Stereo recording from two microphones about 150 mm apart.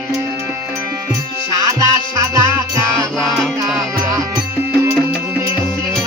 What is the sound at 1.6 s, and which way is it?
Music, 20° right (ahead or behind).